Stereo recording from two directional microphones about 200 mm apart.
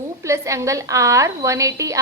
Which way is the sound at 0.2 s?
15° right (ahead or behind).